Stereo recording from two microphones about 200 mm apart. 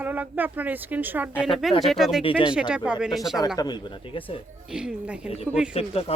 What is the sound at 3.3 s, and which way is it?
Speech, 20° left (ahead or behind).